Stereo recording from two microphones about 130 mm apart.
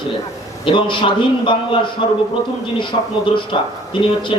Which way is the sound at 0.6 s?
40° left (ahead or behind).